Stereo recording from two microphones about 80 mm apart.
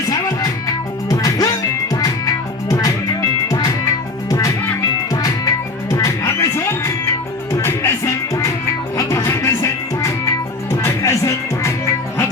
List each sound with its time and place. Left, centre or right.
0.1 s music: left